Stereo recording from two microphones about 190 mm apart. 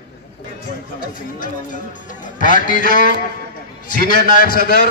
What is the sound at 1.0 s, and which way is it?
A man's voice, 45° left (ahead or behind).